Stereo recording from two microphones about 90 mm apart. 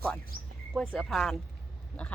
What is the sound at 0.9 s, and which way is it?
Speech, 5° left (ahead or behind).